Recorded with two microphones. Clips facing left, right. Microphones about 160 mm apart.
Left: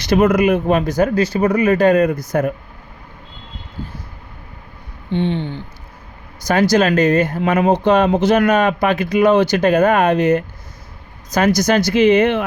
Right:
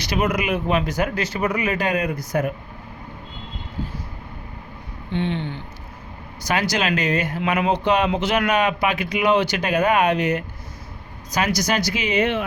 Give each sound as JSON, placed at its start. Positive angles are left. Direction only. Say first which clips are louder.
{"t": 0.0, "sound": "speech", "louder": "left 9 dB", "side_deg": 50}
{"t": 5.1, "sound": "a sound", "louder": "left 5 dB", "side_deg": 30}
{"t": 6.4, "sound": "speech", "louder": "left 8 dB", "side_deg": 45}